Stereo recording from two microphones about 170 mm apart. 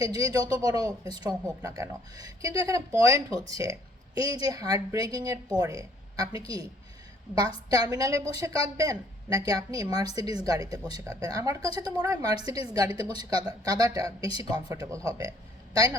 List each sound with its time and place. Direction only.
0.0 s a woman's voice: 20° right (ahead or behind)
7.7 s a woman's voice: 20° right (ahead or behind)